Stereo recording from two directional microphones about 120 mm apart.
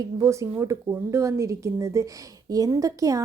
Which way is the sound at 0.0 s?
25° right (ahead or behind).